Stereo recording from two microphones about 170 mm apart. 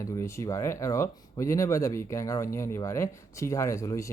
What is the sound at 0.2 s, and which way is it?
Speech, 15° left (ahead or behind).